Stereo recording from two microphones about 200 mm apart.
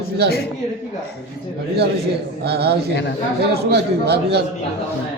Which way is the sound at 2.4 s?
55° right (ahead or behind).